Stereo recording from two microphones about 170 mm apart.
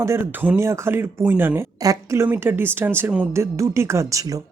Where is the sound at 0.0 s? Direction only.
15° right (ahead or behind).